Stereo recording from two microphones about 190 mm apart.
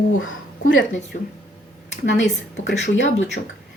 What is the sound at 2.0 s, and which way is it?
Speech, 65° left (ahead or behind).